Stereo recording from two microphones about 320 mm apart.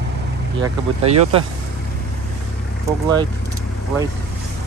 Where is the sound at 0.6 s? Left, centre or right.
Centre.